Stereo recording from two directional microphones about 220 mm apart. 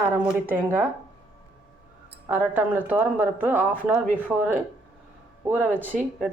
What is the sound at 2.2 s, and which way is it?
A woman's voice, 10° right (ahead or behind).